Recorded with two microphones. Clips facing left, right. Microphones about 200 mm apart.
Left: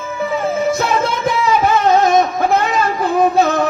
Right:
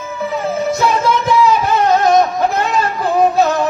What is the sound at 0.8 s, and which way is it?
Music, 55° left (ahead or behind).